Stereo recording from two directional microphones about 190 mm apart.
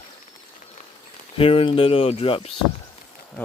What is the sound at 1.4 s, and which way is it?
Speech, 30° left (ahead or behind).